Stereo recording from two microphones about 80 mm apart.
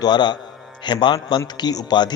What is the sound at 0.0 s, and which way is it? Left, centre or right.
A man's voice, left.